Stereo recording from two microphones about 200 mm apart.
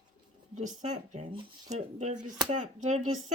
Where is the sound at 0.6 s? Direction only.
35° right (ahead or behind).